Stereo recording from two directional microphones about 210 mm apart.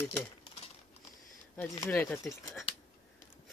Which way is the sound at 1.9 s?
10° left (ahead or behind).